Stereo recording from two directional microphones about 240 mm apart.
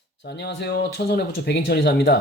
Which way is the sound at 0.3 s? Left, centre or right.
Left.